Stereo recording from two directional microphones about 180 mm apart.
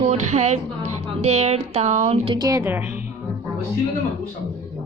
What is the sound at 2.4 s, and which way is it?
Speech, 15° right (ahead or behind).